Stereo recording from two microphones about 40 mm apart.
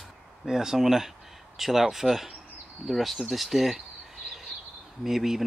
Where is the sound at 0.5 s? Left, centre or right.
Centre.